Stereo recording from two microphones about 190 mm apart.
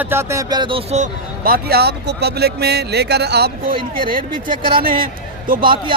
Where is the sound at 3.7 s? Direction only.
25° right (ahead or behind).